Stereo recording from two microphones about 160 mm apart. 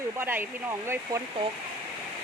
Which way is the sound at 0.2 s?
15° right (ahead or behind).